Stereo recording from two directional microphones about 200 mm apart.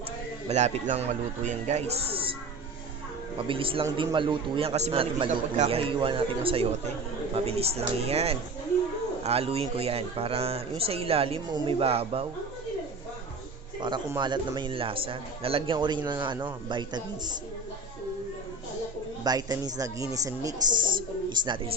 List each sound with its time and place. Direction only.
0.4 s speech: 35° right (ahead or behind)
3.3 s a man's voice: 25° right (ahead or behind)
13.8 s a man's voice: 20° right (ahead or behind)
19.2 s a man's voice: 20° right (ahead or behind)